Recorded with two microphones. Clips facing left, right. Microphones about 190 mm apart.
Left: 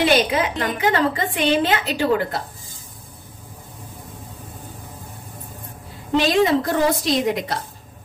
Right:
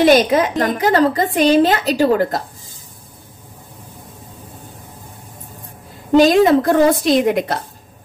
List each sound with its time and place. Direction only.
0.0 s a woman's voice: 45° right (ahead or behind)
6.1 s a woman's voice: 45° right (ahead or behind)